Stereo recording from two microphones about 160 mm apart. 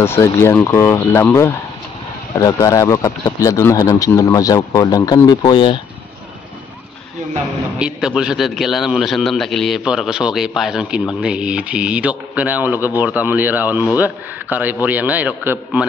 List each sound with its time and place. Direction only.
0.0 s speech: 15° left (ahead or behind)
7.8 s a man's voice: 5° right (ahead or behind)